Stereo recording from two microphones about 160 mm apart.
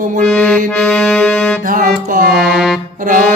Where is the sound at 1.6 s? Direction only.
60° right (ahead or behind).